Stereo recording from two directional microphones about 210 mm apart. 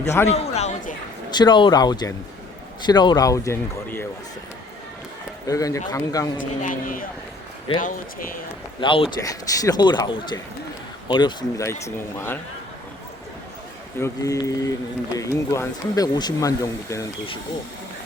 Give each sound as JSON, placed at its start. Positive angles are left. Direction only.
{"t": 0.3, "sound": "speech", "side_deg": 30}
{"t": 1.3, "sound": "speech", "side_deg": 20}
{"t": 5.5, "sound": "speech", "side_deg": 15}
{"t": 6.6, "sound": "speech", "side_deg": 40}
{"t": 8.8, "sound": "speech", "side_deg": 25}
{"t": 14.0, "sound": "speech", "side_deg": 15}